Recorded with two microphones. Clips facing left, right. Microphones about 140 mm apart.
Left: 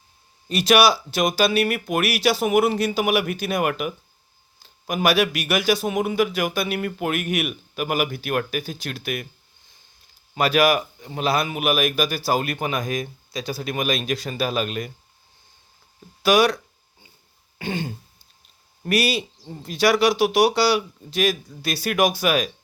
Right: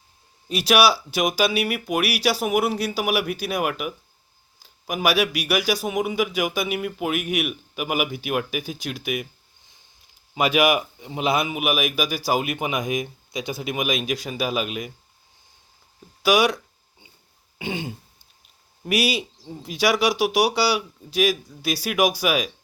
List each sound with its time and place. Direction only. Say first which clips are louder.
0.4 s speech: left 1 dB; 10° right (ahead or behind)
10.3 s speech: left 1 dB; 15° right (ahead or behind)
16.2 s speech: left 2 dB; 10° right (ahead or behind)
17.6 s speech: left 1 dB; 15° right (ahead or behind)